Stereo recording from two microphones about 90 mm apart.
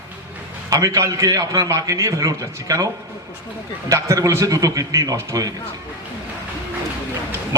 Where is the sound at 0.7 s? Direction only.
35° right (ahead or behind).